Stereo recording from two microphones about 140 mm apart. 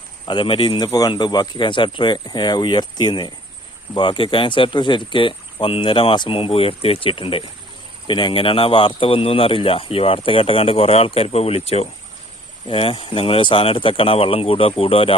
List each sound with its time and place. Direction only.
0.3 s a man's voice: 35° left (ahead or behind)
0.9 s a man's voice: 25° left (ahead or behind)